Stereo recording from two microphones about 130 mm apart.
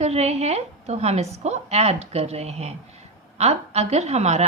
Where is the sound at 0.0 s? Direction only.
55° right (ahead or behind).